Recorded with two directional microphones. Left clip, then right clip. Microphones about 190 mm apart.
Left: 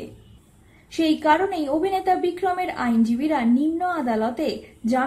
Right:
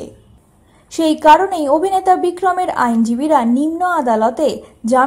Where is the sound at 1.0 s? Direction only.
25° right (ahead or behind).